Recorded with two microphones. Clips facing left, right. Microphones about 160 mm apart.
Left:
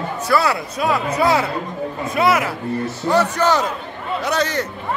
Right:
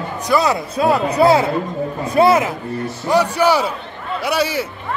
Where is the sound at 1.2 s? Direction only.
30° right (ahead or behind).